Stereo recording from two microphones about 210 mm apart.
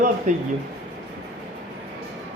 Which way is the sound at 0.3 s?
35° right (ahead or behind).